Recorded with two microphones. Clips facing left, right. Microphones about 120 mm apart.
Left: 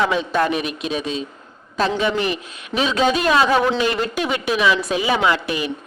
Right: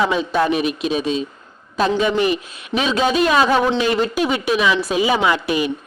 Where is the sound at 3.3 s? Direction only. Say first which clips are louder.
Right 1 dB; centre (ahead or behind).